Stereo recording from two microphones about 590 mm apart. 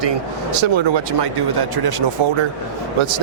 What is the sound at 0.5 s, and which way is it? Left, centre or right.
Speech, right.